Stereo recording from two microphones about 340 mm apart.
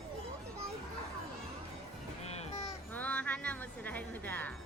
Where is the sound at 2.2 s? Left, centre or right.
Centre.